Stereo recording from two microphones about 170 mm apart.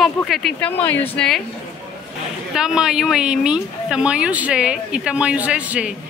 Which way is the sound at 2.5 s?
5° right (ahead or behind).